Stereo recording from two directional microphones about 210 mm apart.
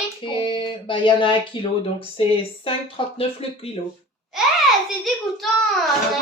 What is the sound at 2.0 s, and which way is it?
Speech, 25° left (ahead or behind).